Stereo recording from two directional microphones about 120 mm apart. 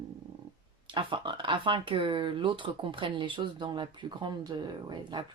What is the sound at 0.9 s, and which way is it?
Speech, 45° right (ahead or behind).